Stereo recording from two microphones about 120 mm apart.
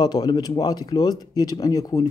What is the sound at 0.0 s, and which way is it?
Speech, 35° left (ahead or behind).